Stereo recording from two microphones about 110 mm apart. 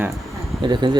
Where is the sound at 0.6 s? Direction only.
45° right (ahead or behind).